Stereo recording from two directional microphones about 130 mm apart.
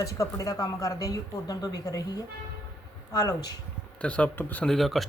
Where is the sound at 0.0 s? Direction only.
25° left (ahead or behind).